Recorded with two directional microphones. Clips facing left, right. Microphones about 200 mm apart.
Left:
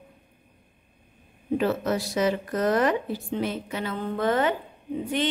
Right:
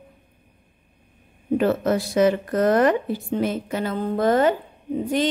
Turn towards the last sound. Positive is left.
turn(degrees=-40)  # may be behind; listen again after turning